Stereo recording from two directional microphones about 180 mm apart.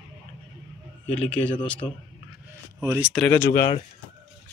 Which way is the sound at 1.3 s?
5° left (ahead or behind).